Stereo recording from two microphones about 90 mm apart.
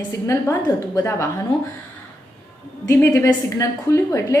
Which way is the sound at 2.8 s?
35° left (ahead or behind).